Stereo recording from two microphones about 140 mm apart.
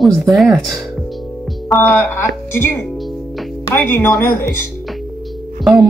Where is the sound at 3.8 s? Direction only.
10° left (ahead or behind).